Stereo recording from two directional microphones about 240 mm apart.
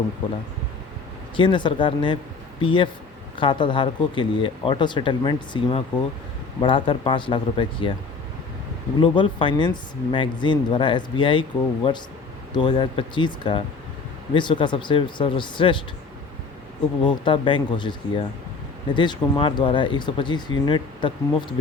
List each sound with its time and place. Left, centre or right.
1.4 s speech: centre
9.0 s speech: left
17.0 s speech: left